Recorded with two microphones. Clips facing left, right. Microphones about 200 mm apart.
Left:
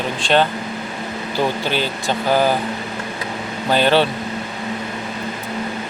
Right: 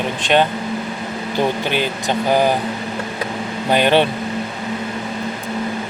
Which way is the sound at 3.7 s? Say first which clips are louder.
Right 1 dB; 15° right (ahead or behind).